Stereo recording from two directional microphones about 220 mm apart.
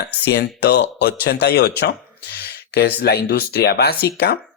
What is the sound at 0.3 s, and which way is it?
Speech, 50° left (ahead or behind).